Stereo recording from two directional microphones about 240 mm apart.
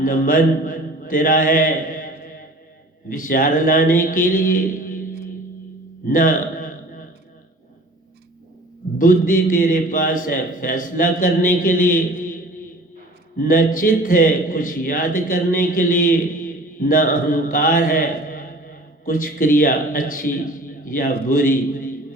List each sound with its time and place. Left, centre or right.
0.0 s a man's voice: left
6.1 s a man's voice: left
9.0 s a man's voice: left
13.4 s a man's voice: left